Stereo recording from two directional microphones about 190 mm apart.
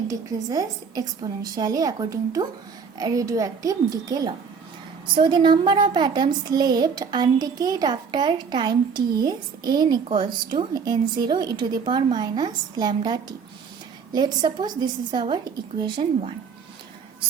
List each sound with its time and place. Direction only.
0.1 s a woman's voice: 20° right (ahead or behind)